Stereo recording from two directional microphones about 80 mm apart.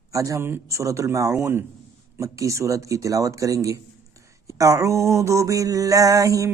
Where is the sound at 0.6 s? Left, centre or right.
Right.